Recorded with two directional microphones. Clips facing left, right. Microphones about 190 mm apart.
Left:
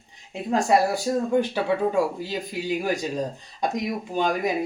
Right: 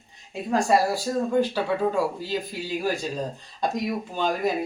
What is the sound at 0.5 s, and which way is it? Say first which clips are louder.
Speech: left 1 dB; 20° left (ahead or behind).